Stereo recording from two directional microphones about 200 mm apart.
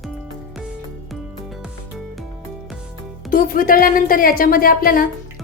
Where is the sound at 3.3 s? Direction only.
45° left (ahead or behind).